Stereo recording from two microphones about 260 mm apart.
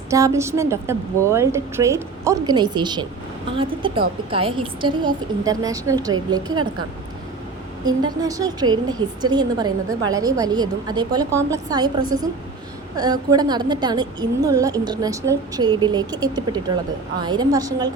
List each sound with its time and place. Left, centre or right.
0.1 s a woman's voice: centre
7.9 s a woman's voice: centre